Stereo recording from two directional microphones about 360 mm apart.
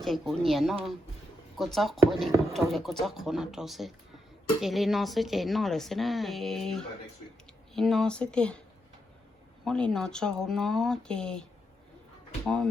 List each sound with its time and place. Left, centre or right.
0.0 s speech: centre
9.6 s speech: centre